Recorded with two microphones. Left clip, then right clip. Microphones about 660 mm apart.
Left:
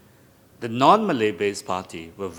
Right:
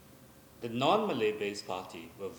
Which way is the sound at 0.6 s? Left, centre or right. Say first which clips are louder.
Left 12 dB; left.